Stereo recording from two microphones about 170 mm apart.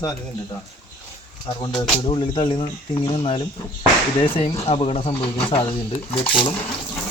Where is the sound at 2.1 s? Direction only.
30° left (ahead or behind).